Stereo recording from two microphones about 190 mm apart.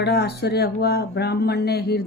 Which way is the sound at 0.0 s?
60° left (ahead or behind).